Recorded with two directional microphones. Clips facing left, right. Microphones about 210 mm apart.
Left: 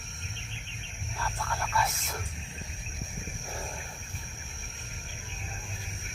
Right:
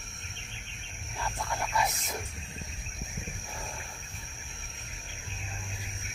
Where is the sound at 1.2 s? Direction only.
20° right (ahead or behind).